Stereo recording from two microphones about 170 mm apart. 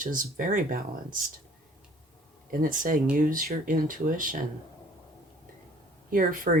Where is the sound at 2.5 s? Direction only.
55° right (ahead or behind).